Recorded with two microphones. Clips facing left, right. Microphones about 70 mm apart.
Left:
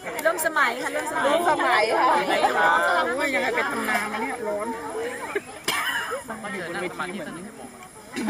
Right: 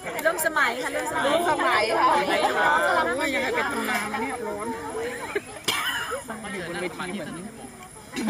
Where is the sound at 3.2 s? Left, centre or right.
Left.